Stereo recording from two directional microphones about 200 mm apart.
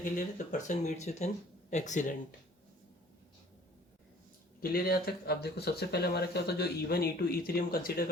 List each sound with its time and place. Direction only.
0.0 s speech: 40° left (ahead or behind)
4.6 s speech: 50° left (ahead or behind)